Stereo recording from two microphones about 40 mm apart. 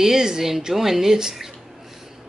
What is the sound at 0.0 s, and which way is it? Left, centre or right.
Speech, centre.